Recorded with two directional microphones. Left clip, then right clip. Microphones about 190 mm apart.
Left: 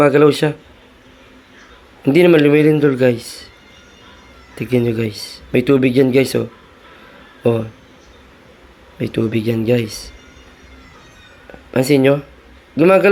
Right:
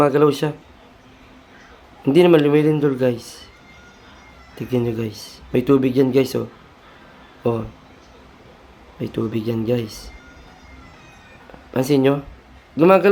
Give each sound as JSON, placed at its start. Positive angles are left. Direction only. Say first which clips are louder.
{"t": 0.0, "sound": "speech", "louder": "left 4 dB", "side_deg": 15}
{"t": 2.0, "sound": "speech", "louder": "left 3 dB", "side_deg": 15}
{"t": 4.5, "sound": "speech", "louder": "left 5 dB", "side_deg": 15}
{"t": 9.0, "sound": "speech", "louder": "left 5 dB", "side_deg": 15}
{"t": 11.7, "sound": "speech", "louder": "left 4 dB", "side_deg": 15}